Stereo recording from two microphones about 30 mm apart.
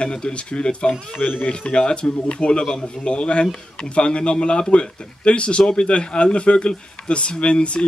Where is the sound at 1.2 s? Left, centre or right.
Left.